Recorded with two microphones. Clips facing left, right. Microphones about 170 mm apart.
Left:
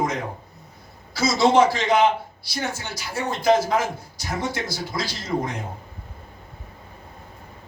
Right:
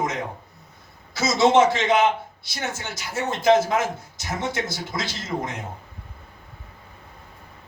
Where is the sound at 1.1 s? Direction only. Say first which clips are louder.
Even; 20° right (ahead or behind).